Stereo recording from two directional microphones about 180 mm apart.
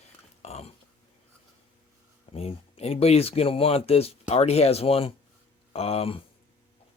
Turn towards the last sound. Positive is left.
turn(degrees=35)  # may be behind; listen again after turning